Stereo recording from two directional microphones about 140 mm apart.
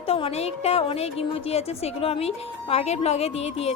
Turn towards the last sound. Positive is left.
turn(degrees=45)  # may be behind; listen again after turning